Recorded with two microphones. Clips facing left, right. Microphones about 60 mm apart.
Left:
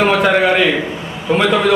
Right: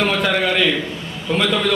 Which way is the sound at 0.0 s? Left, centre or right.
Left.